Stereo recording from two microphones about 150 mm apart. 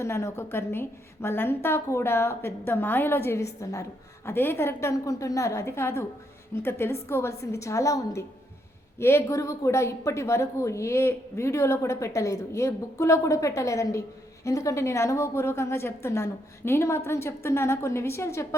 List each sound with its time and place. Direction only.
0.0 s a woman's voice: 20° left (ahead or behind)